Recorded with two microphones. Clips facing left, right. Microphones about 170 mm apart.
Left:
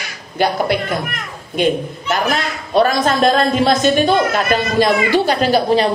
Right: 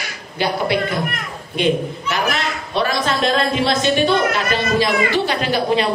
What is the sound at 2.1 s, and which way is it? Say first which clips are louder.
A woman's voice: left 4 dB; 45° left (ahead or behind).